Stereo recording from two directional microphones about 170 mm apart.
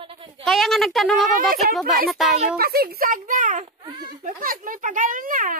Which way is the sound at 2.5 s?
60° right (ahead or behind).